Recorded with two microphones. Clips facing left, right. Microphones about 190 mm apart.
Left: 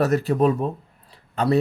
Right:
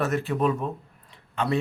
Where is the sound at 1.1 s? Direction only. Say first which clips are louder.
Left 6 dB; 35° left (ahead or behind).